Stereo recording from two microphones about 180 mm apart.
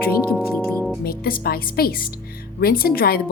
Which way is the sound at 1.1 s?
55° left (ahead or behind).